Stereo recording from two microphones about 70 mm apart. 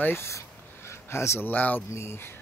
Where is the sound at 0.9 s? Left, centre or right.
Left.